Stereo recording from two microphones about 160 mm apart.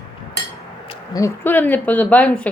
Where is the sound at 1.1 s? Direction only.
15° left (ahead or behind).